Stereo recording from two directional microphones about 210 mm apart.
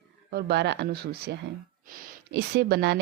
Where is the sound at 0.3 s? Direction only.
50° right (ahead or behind).